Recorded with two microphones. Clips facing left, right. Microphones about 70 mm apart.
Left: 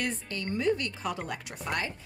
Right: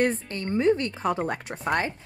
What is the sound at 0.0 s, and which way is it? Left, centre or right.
Speech, right.